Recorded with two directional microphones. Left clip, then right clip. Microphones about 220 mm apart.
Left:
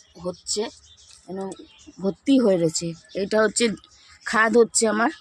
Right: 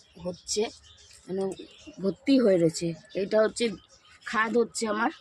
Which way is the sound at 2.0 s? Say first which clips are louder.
Left 3 dB; 30° left (ahead or behind).